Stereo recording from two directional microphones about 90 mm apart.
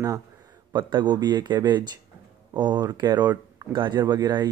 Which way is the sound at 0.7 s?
55° right (ahead or behind).